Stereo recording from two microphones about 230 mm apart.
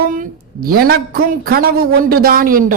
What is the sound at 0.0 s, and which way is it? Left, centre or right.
A woman's voice, right.